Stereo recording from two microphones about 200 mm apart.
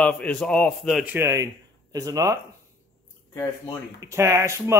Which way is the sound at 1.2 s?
15° right (ahead or behind).